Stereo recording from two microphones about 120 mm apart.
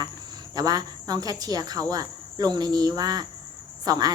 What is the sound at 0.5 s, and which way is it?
Speech, 30° right (ahead or behind).